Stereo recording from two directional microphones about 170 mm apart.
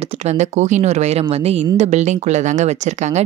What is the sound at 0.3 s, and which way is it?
Speech, 45° right (ahead or behind).